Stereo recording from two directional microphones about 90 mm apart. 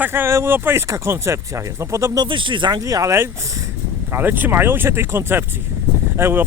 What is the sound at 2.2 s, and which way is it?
Speech, 65° right (ahead or behind).